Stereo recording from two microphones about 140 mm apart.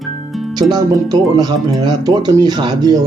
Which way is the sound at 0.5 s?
30° right (ahead or behind).